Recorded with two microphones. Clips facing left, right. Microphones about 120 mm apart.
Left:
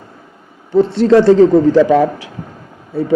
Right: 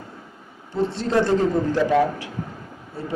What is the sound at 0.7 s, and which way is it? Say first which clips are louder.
A man's voice: left 12 dB; 65° left (ahead or behind).